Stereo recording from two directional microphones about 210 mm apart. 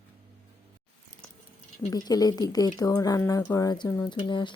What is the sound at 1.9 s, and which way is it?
Speech, 20° left (ahead or behind).